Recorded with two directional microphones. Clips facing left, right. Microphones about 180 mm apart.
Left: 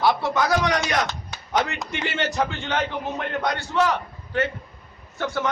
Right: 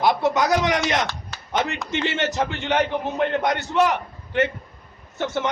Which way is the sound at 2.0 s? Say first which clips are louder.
Even; 20° right (ahead or behind).